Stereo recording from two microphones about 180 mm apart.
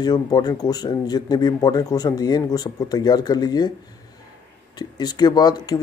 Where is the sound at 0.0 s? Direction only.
20° left (ahead or behind).